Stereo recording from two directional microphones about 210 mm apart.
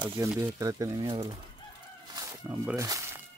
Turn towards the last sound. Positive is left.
turn(degrees=-15)  # may be behind; listen again after turning